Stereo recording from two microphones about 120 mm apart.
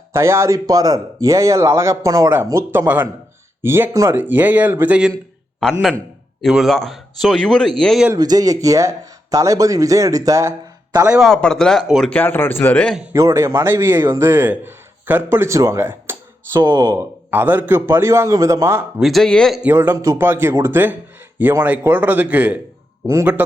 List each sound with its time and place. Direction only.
0.1 s speech: 20° right (ahead or behind)
5.5 s a man's voice: 5° left (ahead or behind)
8.1 s speech: 30° right (ahead or behind)
11.1 s speech: centre (ahead or behind)
12.1 s a man's voice: 15° left (ahead or behind)
13.1 s speech: 25° right (ahead or behind)
16.6 s speech: 30° right (ahead or behind)
18.9 s speech: centre (ahead or behind)
19.6 s speech: 15° right (ahead or behind)